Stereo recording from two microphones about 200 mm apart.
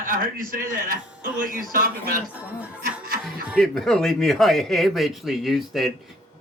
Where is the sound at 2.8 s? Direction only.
45° right (ahead or behind).